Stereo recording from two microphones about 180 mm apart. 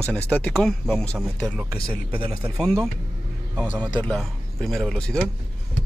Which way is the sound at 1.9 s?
30° right (ahead or behind).